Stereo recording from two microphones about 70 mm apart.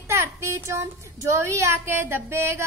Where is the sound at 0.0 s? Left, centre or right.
Right.